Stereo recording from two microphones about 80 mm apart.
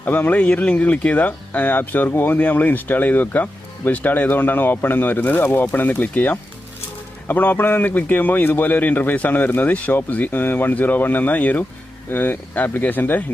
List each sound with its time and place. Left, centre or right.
0.0 s speech: left